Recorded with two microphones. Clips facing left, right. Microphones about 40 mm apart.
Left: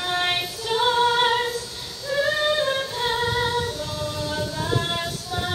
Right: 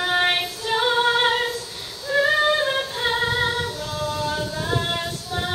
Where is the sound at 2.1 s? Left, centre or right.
Centre.